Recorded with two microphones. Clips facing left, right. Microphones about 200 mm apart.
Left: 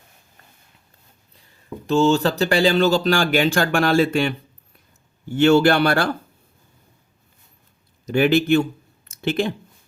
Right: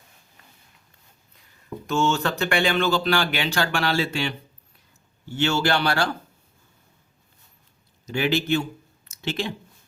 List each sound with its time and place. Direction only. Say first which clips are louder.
1.9 s speech: left 6 dB; 35° left (ahead or behind); by 6.1 s 55° left (ahead or behind)
8.0 s speech: left 7 dB; 55° left (ahead or behind)
9.0 s a sound: left 7 dB; 55° left (ahead or behind)